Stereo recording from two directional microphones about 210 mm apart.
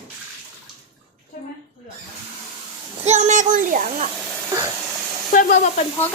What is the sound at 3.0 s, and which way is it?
A child's voice, 35° right (ahead or behind).